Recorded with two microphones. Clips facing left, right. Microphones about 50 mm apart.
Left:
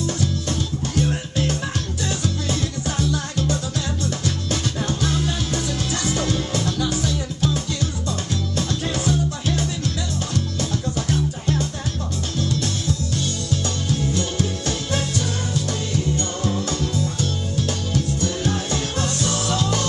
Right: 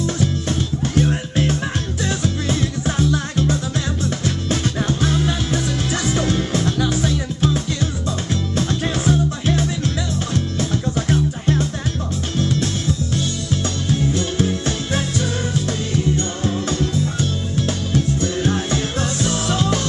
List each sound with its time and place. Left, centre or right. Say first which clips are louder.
0.0 s music: right 3 dB; right
13.8 s music: right 4 dB; right
16.2 s music: right 2 dB; right